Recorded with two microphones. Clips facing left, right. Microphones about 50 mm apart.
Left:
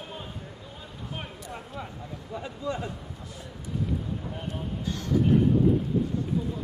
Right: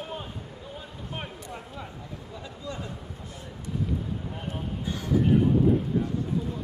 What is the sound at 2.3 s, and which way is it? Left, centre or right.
Speech, left.